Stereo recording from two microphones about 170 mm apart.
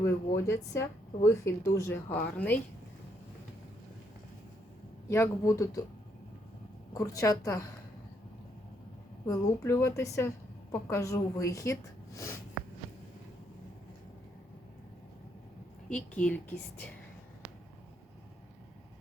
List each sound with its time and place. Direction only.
0.4 s a woman's voice: 15° left (ahead or behind)
5.0 s a woman's voice: 15° left (ahead or behind)
6.9 s a woman's voice: 20° left (ahead or behind)
9.2 s a woman's voice: 15° left (ahead or behind)
15.9 s a woman's voice: 5° left (ahead or behind)